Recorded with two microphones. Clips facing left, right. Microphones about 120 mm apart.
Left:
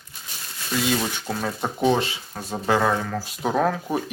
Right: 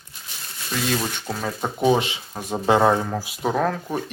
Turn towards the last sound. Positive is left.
turn(degrees=5)  # may be behind; listen again after turning